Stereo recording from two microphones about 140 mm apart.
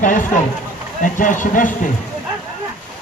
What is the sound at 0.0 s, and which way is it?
Speech, 70° left (ahead or behind).